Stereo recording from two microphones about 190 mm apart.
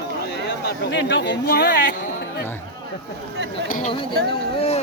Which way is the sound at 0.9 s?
65° left (ahead or behind).